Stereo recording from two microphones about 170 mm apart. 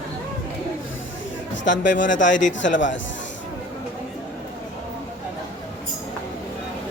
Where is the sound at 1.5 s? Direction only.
90° left.